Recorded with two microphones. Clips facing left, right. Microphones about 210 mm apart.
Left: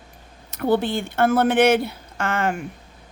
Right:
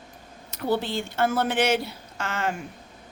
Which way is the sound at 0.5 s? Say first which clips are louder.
Left 5 dB; 55° left (ahead or behind).